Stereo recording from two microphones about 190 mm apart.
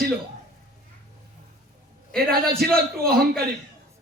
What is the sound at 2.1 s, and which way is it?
Speech, 55° right (ahead or behind).